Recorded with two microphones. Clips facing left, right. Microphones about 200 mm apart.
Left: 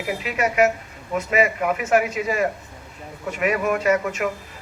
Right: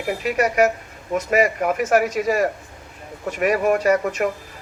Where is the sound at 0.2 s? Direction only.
40° right (ahead or behind).